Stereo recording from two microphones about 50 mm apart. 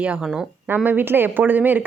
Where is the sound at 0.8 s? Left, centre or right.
Right.